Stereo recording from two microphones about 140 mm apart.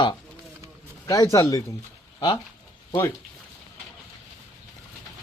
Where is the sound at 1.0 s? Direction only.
20° left (ahead or behind).